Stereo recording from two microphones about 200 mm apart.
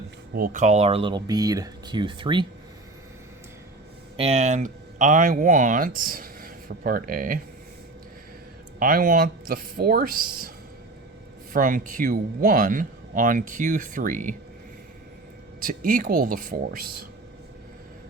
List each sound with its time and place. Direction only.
0.3 s speech: 40° right (ahead or behind); by 2.5 s 25° right (ahead or behind)
4.2 s speech: 30° right (ahead or behind)
8.8 s speech: 45° right (ahead or behind)
11.5 s a man's voice: 40° right (ahead or behind)
15.6 s speech: 45° right (ahead or behind)